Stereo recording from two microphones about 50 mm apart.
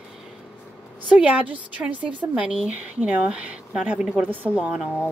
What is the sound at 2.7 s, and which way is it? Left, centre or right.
A woman's voice, right.